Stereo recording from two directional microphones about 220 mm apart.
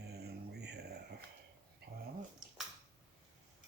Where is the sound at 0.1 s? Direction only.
50° right (ahead or behind).